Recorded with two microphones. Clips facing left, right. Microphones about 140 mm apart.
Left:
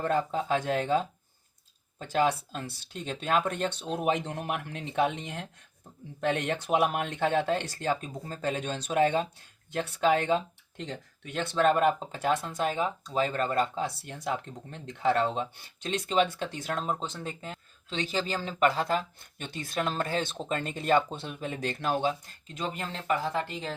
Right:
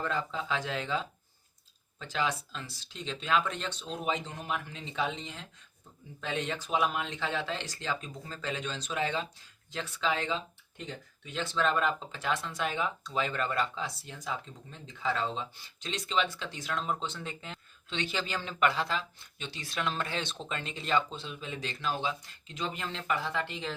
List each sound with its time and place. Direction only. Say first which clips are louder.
0.0 s speech: left 6 dB; 50° left (ahead or behind)
10.8 s speech: left 4 dB; 80° left
11.3 s speech: left 5 dB; 55° left (ahead or behind)